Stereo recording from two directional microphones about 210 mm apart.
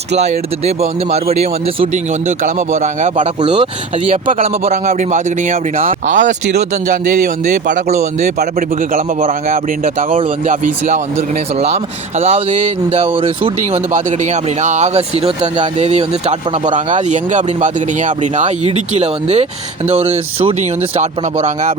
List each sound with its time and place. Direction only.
0.2 s speech: 30° right (ahead or behind)
12.2 s speech: 30° right (ahead or behind)
14.6 s speech: 35° right (ahead or behind)